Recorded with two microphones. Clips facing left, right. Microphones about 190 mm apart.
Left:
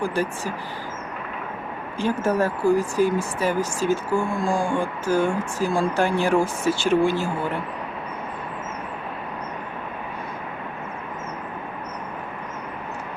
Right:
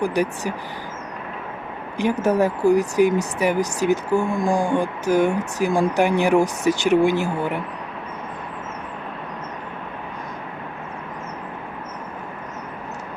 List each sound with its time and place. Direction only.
0.0 s speech: 15° right (ahead or behind)
2.2 s speech: 15° right (ahead or behind)